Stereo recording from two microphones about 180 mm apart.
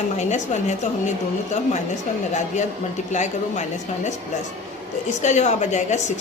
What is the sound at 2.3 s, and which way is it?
A woman's voice, 40° left (ahead or behind).